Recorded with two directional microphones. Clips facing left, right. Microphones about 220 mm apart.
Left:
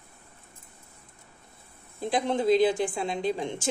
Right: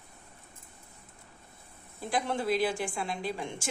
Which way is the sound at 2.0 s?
20° left (ahead or behind).